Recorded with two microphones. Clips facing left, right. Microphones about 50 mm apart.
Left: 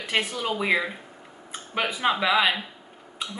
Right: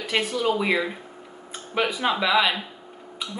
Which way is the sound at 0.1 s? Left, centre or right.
Centre.